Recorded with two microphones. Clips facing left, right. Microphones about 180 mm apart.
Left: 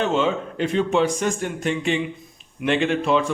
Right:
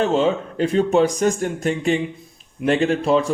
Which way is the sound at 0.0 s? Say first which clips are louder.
Right 3 dB; 35° right (ahead or behind).